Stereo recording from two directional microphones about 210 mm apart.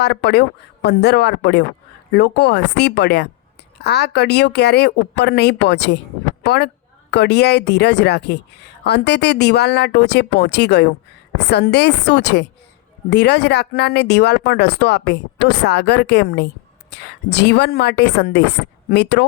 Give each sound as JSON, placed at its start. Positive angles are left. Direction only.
{"t": 0.0, "sound": "speech", "side_deg": 50}